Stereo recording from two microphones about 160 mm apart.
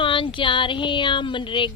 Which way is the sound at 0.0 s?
30° left (ahead or behind).